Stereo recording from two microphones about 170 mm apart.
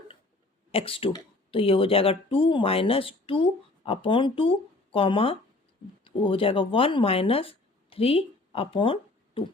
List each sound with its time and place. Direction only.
0.7 s speech: 35° left (ahead or behind)